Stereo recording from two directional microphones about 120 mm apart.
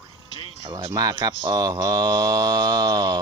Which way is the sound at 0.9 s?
30° right (ahead or behind).